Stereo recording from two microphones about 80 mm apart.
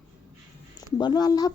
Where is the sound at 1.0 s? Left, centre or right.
Left.